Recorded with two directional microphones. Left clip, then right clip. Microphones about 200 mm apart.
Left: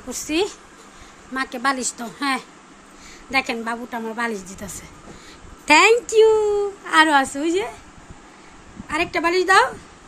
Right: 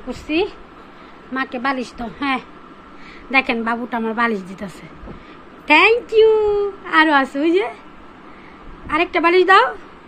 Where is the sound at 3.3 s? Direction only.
15° left (ahead or behind).